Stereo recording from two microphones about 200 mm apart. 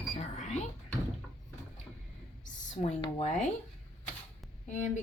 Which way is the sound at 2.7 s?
35° left (ahead or behind).